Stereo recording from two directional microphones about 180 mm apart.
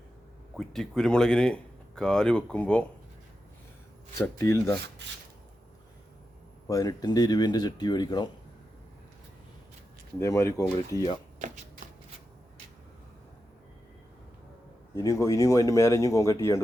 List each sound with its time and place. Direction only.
0.5 s speech: centre (ahead or behind)
4.2 s speech: 15° left (ahead or behind)
6.7 s speech: 20° left (ahead or behind)
10.2 s speech: 15° left (ahead or behind)
14.9 s speech: 15° left (ahead or behind)